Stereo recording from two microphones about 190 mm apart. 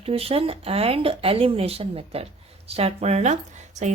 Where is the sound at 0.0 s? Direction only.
30° right (ahead or behind).